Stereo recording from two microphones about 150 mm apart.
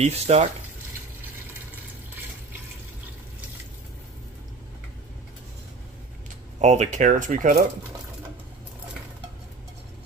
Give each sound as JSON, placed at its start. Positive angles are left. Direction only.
{"t": 0.0, "sound": "speech", "side_deg": -45}
{"t": 6.6, "sound": "speech", "side_deg": -50}